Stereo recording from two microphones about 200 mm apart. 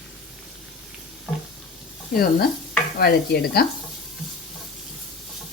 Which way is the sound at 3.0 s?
50° left (ahead or behind).